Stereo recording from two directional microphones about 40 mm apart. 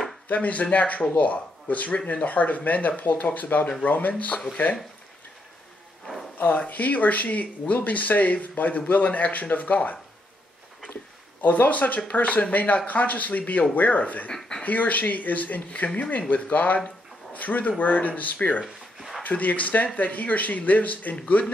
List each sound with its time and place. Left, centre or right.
0.3 s speech: left
6.3 s speech: left
11.4 s speech: left
18.9 s a sound: centre
19.2 s speech: left